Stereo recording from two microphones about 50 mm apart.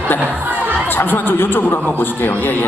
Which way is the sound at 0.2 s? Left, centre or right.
Right.